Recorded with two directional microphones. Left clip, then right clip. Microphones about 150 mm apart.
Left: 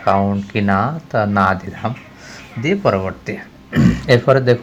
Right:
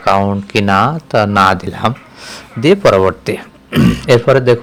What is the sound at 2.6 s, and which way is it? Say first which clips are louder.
Speech: right 8 dB; 45° right (ahead or behind).